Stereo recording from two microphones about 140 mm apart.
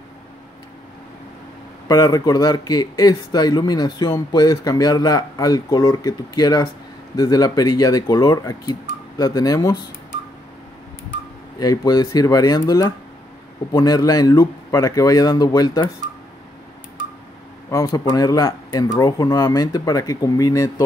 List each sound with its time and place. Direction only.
1.9 s speech: 25° left (ahead or behind)
11.6 s speech: 25° left (ahead or behind)
17.8 s speech: 25° left (ahead or behind)